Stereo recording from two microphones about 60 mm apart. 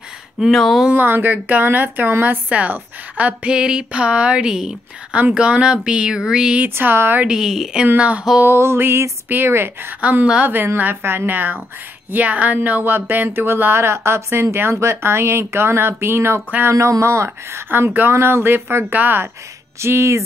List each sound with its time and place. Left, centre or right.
0.5 s speech: centre
0.9 s speech: right
2.5 s a woman's voice: right
3.5 s a sound: centre
6.7 s speech: right
7.2 s a sound: centre
7.8 s speech: right
8.5 s speech: right
10.2 s a sound: centre
10.8 s speech: right
16.7 s speech: right
19.8 s speech: right